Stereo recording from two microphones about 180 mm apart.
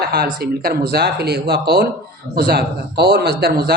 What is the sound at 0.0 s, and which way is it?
Speech, 60° right (ahead or behind).